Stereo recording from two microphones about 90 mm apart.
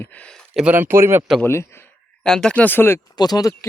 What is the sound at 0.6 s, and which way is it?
Speech, 25° right (ahead or behind).